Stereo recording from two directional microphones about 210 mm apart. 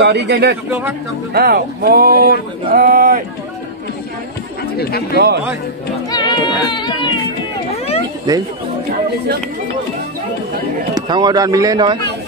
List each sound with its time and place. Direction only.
0.0 s speech: 55° right (ahead or behind)
0.7 s speech: 10° right (ahead or behind)
1.3 s speech: 45° right (ahead or behind)
5.1 s speech: 50° right (ahead or behind)
6.0 s speech: 20° left (ahead or behind)
7.7 s a sound: 30° left (ahead or behind)
11.0 s speech: 20° right (ahead or behind)